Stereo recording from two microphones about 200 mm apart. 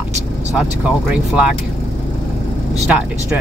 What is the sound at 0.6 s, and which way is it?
Speech, 5° right (ahead or behind).